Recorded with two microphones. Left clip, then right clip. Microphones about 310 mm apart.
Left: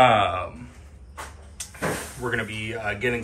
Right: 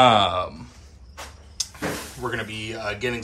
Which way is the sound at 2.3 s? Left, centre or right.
Centre.